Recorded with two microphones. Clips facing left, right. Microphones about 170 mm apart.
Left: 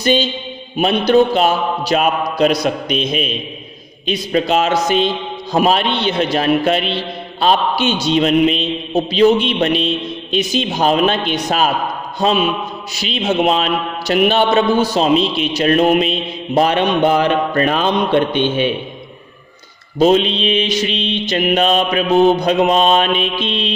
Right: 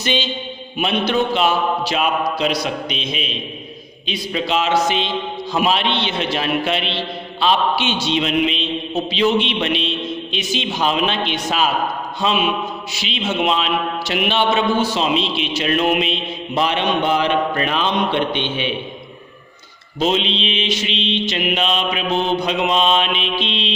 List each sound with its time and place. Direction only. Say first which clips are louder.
0.0 s a man's voice: left 6 dB; 40° left (ahead or behind)
20.0 s a man's voice: left 7 dB; 45° left (ahead or behind)